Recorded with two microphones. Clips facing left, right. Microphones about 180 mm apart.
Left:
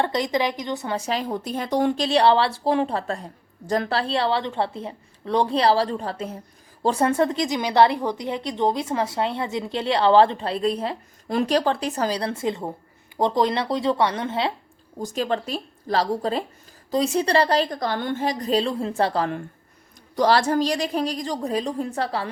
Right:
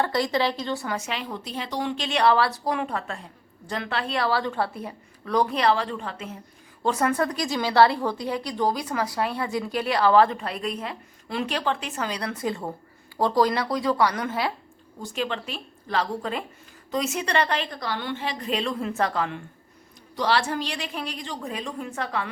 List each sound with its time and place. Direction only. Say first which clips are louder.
0.0 s a woman's voice: left 1 dB; 20° left (ahead or behind)
0.9 s a woman's voice: left 6 dB; 35° left (ahead or behind)
14.9 s a woman's voice: left 5 dB; 40° left (ahead or behind)